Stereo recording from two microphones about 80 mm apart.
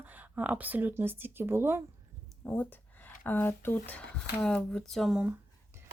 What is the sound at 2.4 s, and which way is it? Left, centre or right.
Speech, left.